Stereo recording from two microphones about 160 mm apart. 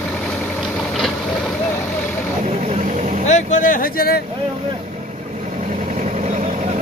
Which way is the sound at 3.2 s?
50° left (ahead or behind).